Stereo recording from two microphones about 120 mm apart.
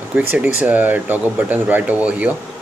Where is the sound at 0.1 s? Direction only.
15° right (ahead or behind).